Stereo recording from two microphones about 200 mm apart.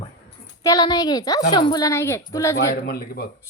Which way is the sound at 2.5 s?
50° left (ahead or behind).